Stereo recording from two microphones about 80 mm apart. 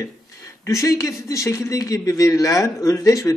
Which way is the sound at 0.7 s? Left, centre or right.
Left.